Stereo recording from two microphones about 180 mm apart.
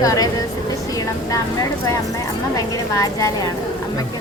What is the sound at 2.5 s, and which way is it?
Speech, 20° left (ahead or behind).